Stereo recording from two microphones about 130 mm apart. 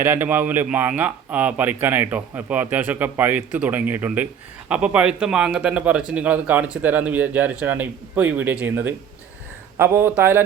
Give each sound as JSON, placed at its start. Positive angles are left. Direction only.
{"t": 0.0, "sound": "a man's voice", "side_deg": -15}